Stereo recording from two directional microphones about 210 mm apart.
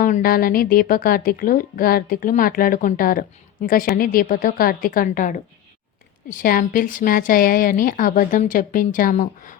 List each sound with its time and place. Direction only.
0.0 s a woman's voice: 45° left (ahead or behind)